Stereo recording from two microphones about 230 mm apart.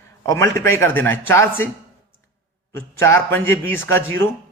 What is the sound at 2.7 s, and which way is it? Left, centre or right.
A man's voice, centre.